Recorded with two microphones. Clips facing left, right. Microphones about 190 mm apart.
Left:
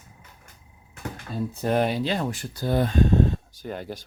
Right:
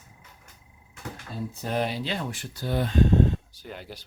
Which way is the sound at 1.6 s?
55° left (ahead or behind).